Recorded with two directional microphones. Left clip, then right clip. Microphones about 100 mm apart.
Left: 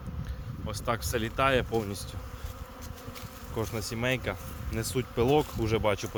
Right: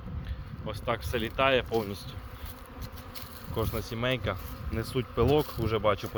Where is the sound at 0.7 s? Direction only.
30° left (ahead or behind).